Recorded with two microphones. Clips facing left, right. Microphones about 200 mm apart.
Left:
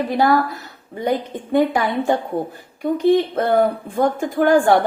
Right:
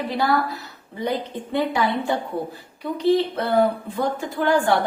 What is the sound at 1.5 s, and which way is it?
Speech, 45° left (ahead or behind).